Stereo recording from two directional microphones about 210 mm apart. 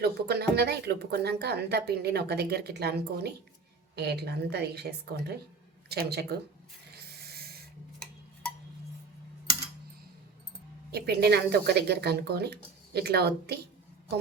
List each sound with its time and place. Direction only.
0.0 s speech: 50° right (ahead or behind)
6.9 s a sound: 50° right (ahead or behind)
10.9 s speech: 50° right (ahead or behind)